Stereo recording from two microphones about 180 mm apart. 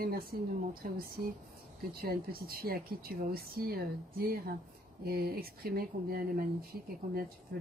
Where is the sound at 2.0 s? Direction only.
55° right (ahead or behind).